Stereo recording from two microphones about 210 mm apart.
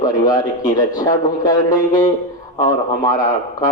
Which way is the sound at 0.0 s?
15° left (ahead or behind).